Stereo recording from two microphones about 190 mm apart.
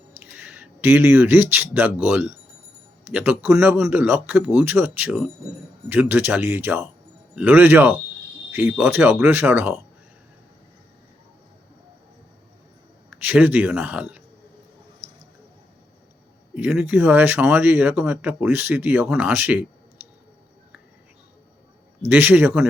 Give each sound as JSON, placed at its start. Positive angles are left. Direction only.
{"t": 0.3, "sound": "speech", "side_deg": -5}
{"t": 13.1, "sound": "speech", "side_deg": -10}
{"t": 15.0, "sound": "squish", "side_deg": -30}
{"t": 16.6, "sound": "speech", "side_deg": -10}
{"t": 22.1, "sound": "speech", "side_deg": -10}